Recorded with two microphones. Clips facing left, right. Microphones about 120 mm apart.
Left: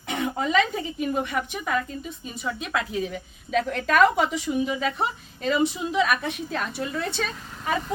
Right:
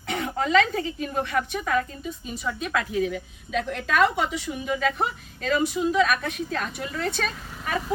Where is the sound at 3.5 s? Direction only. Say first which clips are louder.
Left 3 dB; 45° left (ahead or behind).